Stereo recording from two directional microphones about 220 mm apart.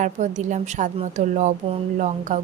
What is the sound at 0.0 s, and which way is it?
A woman's voice, 35° right (ahead or behind).